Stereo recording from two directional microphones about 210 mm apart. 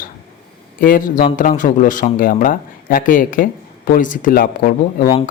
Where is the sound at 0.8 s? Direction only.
40° left (ahead or behind).